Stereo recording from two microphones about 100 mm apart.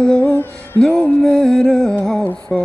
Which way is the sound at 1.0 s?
5° left (ahead or behind).